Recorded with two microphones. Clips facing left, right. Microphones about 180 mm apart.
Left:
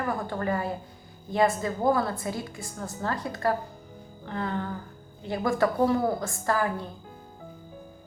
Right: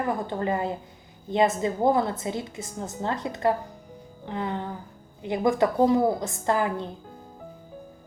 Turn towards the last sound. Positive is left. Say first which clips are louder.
# right 2 dB
turn(degrees=-20)  # may be behind; listen again after turning